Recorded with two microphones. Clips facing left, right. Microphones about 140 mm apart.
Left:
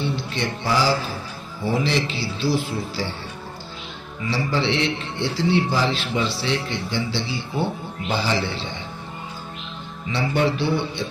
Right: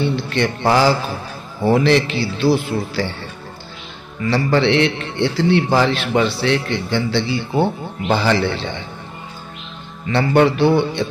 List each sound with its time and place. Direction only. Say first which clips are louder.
0.0 s a man's voice: right 7 dB; 65° right (ahead or behind)
4.3 s a man's voice: right 7 dB; 60° right (ahead or behind)
10.0 s a man's voice: right 7 dB; 65° right (ahead or behind)